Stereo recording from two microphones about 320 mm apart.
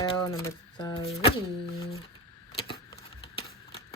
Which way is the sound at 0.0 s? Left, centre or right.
Centre.